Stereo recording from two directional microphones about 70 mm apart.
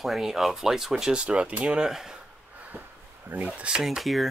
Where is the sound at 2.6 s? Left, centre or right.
Right.